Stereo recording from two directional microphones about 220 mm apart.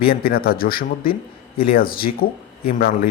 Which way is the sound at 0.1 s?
40° left (ahead or behind).